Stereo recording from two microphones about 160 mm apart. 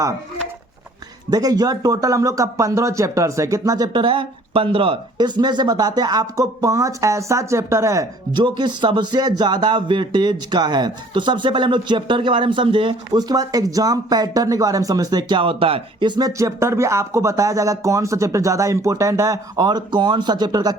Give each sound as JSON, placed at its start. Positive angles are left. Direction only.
{"t": 1.3, "sound": "speech", "side_deg": -25}